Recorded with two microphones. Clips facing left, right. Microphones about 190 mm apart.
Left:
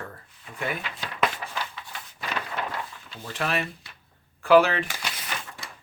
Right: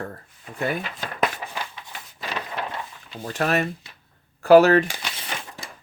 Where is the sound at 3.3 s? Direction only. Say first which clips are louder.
Right 6 dB; 45° right (ahead or behind).